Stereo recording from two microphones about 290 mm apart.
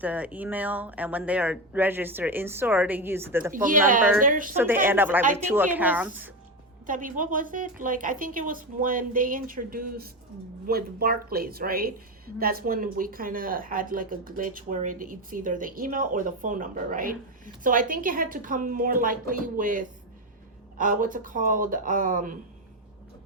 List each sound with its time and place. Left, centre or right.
0.0 s speech: centre
3.5 s speech: right
4.5 s speech: centre
6.8 s speech: right